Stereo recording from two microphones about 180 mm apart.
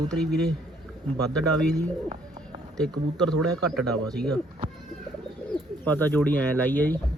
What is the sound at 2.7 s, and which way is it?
Speech, 5° left (ahead or behind).